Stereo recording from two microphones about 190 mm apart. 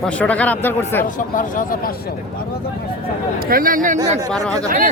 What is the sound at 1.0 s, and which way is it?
Speech, 45° left (ahead or behind).